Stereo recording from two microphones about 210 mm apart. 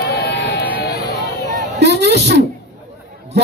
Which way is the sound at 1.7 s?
55° right (ahead or behind).